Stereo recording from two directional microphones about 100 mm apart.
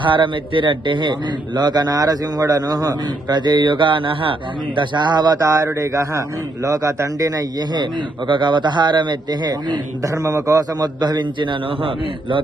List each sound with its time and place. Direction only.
0.0 s a man's voice: 55° right (ahead or behind)
8.3 s speech: 50° right (ahead or behind); by 10.8 s 35° right (ahead or behind)
11.0 s speech: 45° right (ahead or behind)